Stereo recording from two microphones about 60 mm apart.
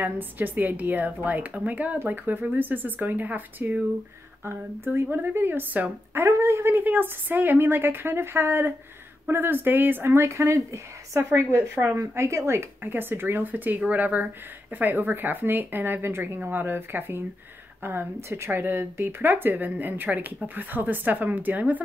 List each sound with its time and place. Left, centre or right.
0.0 s speech: right
4.5 s speech: right
6.1 s speech: right
6.7 s speech: right
11.5 s speech: right
12.0 s speech: right